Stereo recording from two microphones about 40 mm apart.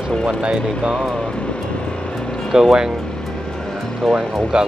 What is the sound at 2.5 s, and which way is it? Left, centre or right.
Speech, centre.